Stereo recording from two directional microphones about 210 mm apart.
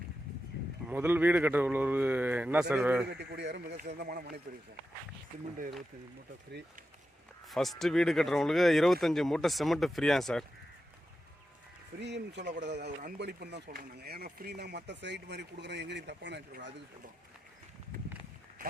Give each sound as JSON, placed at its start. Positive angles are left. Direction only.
{"t": 0.9, "sound": "speech", "side_deg": -10}
{"t": 3.1, "sound": "speech", "side_deg": -55}
{"t": 7.5, "sound": "speech", "side_deg": 0}
{"t": 11.9, "sound": "speech", "side_deg": -55}